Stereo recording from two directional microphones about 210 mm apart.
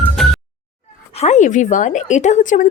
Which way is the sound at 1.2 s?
35° left (ahead or behind).